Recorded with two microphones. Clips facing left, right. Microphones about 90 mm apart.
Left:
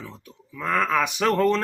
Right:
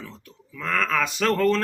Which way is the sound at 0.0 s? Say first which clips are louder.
Left 1 dB; 15° left (ahead or behind).